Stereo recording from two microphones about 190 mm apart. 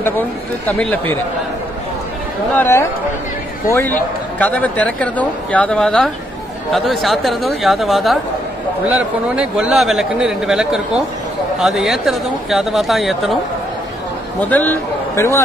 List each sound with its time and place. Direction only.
0.7 s speech: 10° left (ahead or behind)
2.5 s speech: 10° left (ahead or behind)
14.4 s speech: 10° left (ahead or behind)